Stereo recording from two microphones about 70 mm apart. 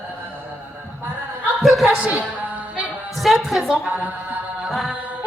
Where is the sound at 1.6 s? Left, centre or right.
Centre.